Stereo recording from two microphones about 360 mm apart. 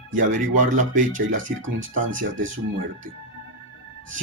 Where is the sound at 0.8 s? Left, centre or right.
Right.